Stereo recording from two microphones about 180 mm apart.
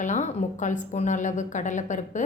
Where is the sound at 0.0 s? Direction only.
40° left (ahead or behind).